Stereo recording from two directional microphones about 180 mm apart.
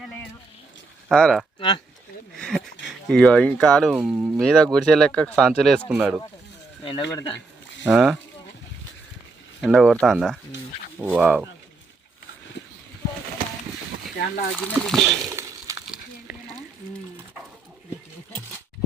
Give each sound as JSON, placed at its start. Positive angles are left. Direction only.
{"t": 0.0, "sound": "a sound", "side_deg": 5}
{"t": 1.0, "sound": "speech", "side_deg": 5}
{"t": 1.5, "sound": "speech", "side_deg": 30}
{"t": 2.3, "sound": "speech", "side_deg": 0}
{"t": 3.9, "sound": "speech", "side_deg": -10}
{"t": 4.4, "sound": "speech", "side_deg": 5}
{"t": 6.8, "sound": "speech", "side_deg": 25}
{"t": 7.9, "sound": "speech", "side_deg": -5}
{"t": 9.6, "sound": "speech", "side_deg": 0}
{"t": 14.5, "sound": "speech", "side_deg": 5}
{"t": 15.3, "sound": "a sound", "side_deg": -15}